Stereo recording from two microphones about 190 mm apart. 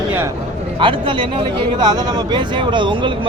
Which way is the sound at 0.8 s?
25° right (ahead or behind).